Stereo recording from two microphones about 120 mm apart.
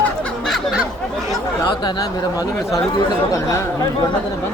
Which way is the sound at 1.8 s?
30° left (ahead or behind).